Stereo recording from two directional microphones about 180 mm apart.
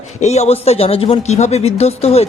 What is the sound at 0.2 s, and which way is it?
Speech, 40° left (ahead or behind).